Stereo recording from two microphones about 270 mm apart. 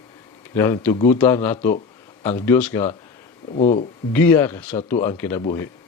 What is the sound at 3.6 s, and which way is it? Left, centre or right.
Speech, left.